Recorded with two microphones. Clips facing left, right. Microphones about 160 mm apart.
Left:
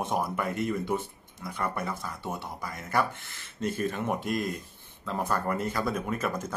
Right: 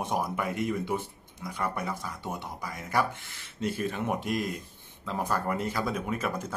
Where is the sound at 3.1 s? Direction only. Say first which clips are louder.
Right 1 dB; 55° left (ahead or behind).